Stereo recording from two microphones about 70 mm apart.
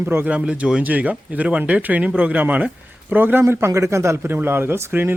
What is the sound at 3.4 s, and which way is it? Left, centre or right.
A man's voice, right.